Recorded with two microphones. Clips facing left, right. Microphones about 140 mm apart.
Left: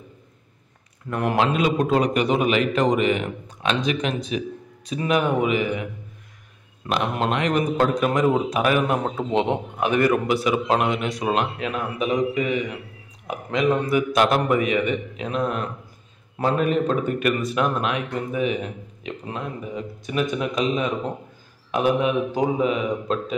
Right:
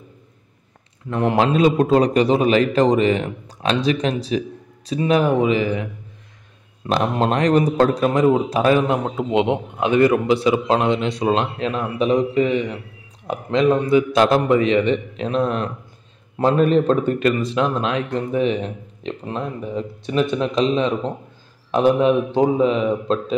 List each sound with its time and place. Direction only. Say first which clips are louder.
1.1 s a man's voice: right 4 dB; 30° right (ahead or behind)
6.9 s a man's voice: right 4 dB; 35° right (ahead or behind)
13.7 s a man's voice: right 4 dB; 25° right (ahead or behind)